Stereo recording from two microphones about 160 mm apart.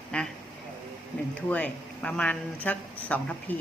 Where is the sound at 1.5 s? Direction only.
10° left (ahead or behind).